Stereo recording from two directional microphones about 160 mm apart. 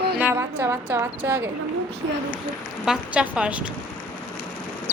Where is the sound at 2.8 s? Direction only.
5° right (ahead or behind).